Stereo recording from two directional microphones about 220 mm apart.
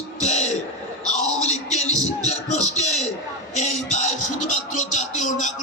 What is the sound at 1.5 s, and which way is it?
Music, 30° left (ahead or behind).